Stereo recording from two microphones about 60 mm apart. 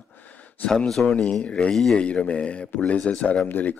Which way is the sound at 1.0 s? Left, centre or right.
Centre.